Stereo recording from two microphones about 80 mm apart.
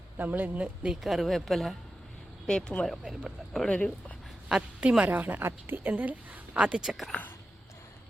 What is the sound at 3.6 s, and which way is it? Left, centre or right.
Speech, centre.